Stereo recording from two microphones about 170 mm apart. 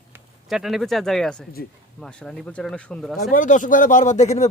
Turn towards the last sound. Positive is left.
turn(degrees=40)  # may be behind; listen again after turning